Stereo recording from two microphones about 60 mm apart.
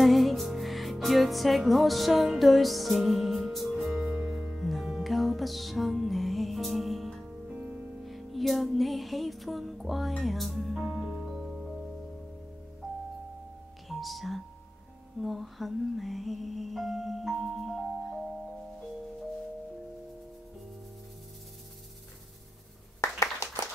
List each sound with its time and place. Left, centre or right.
0.0 s music: centre
7.4 s music: right
8.0 s music: centre
13.8 s music: centre
23.1 s clapping: left